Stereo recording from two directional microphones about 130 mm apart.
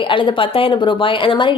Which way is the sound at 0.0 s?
40° left (ahead or behind).